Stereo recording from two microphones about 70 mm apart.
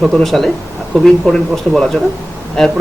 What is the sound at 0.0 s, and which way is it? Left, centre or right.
Speech, centre.